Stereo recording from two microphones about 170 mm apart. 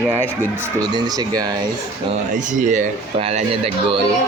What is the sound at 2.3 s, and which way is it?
Speech, 50° right (ahead or behind).